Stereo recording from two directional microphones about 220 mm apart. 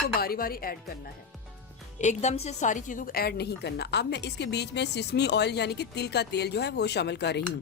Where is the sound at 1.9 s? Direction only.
30° left (ahead or behind).